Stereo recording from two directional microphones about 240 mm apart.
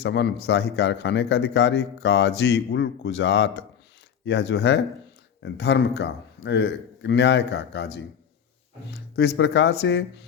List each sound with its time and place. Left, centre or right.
0.0 s speech: left
8.9 s speech: left